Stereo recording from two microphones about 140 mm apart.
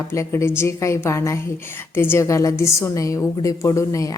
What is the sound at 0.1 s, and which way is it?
A woman's voice, 20° left (ahead or behind).